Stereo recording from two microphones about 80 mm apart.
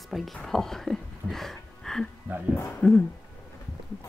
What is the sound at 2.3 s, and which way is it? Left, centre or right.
Speech, right.